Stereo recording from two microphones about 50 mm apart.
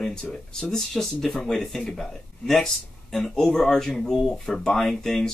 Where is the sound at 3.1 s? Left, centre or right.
Centre.